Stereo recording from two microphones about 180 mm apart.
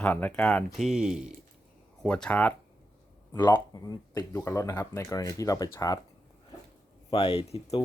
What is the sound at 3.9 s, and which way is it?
Speech, 20° left (ahead or behind).